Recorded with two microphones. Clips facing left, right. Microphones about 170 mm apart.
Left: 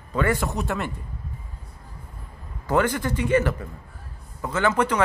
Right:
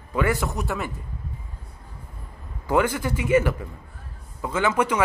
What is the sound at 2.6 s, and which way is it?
A man's voice, 10° right (ahead or behind).